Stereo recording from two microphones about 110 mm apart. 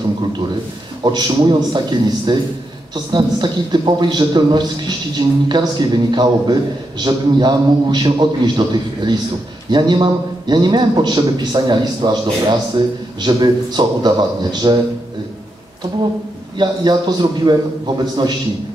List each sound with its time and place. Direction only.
1.0 s a man's voice: 40° right (ahead or behind)
16.5 s a man's voice: 40° right (ahead or behind)